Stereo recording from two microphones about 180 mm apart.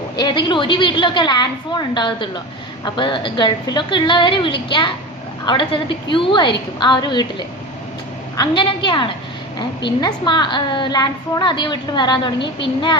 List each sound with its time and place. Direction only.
0.2 s a woman's voice: 25° left (ahead or behind)